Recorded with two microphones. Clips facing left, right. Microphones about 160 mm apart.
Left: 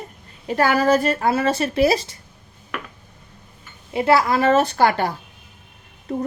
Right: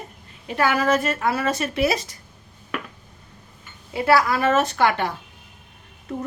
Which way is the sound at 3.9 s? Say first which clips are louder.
Left 2 dB; 25° left (ahead or behind).